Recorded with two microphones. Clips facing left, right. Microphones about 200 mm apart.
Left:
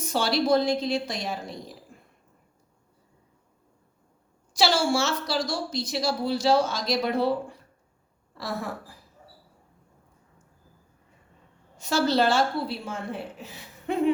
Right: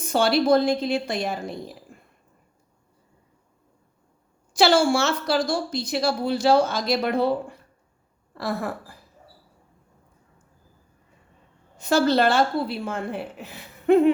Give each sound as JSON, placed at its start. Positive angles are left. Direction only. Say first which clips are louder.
{"t": 0.1, "sound": "a woman's voice", "louder": "right 4 dB", "side_deg": -55}
{"t": 4.5, "sound": "a woman's voice", "louder": "right 5 dB", "side_deg": -55}
{"t": 8.4, "sound": "a woman's voice", "louder": "right 4 dB", "side_deg": -55}
{"t": 11.8, "sound": "a woman's voice", "louder": "right 4 dB", "side_deg": -55}